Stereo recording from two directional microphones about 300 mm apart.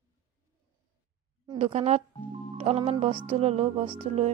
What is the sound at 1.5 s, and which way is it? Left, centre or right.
Speech, right.